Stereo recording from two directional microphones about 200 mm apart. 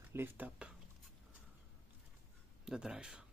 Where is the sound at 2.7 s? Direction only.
5° right (ahead or behind).